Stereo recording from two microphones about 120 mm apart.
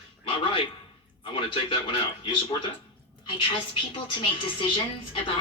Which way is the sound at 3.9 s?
45° left (ahead or behind).